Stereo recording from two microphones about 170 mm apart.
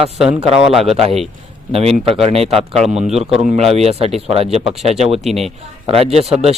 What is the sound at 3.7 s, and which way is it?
Speech, 35° right (ahead or behind).